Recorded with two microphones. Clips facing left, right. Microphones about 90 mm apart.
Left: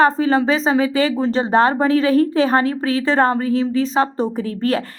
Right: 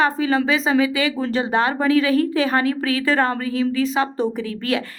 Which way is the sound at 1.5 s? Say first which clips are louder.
Left 3 dB; 35° left (ahead or behind).